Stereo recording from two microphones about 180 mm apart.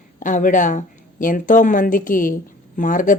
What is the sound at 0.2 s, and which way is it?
A woman's voice, 45° left (ahead or behind).